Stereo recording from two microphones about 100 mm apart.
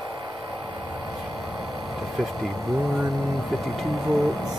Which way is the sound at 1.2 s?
Centre (ahead or behind).